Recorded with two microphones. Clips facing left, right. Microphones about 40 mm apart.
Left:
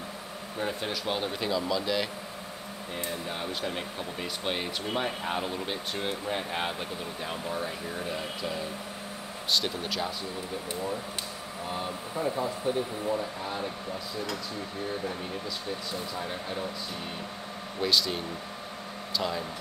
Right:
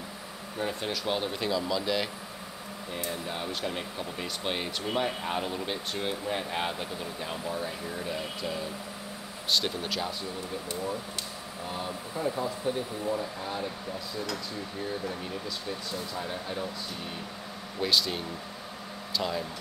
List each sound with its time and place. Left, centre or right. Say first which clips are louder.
0.6 s speech: even; centre
3.1 s speech: even; centre
7.4 s speech: even; left
9.5 s speech: even; centre
11.7 s speech: left 1 dB; centre
13.1 s speech: even; centre
16.2 s speech: even; centre
17.8 s speech: even; centre